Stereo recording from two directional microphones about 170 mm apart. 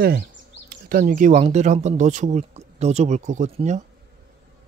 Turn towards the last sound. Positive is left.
turn(degrees=-45)  # may be behind; listen again after turning